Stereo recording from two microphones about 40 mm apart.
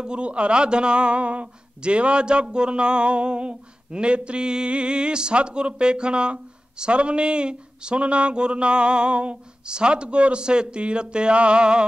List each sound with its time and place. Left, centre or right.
0.0 s a man's voice: right